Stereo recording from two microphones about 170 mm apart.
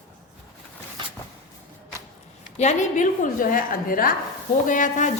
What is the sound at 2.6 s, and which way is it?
A woman's voice, 45° left (ahead or behind).